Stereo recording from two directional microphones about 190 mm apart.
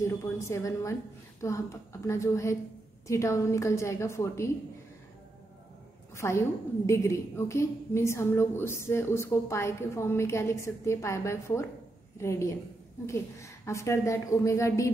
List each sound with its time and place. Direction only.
0.0 s a woman's voice: 15° left (ahead or behind)
6.1 s a woman's voice: 15° left (ahead or behind)